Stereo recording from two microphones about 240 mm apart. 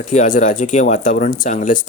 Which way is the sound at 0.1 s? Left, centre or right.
Left.